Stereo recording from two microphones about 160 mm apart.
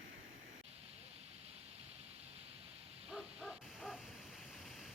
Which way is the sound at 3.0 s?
5° right (ahead or behind).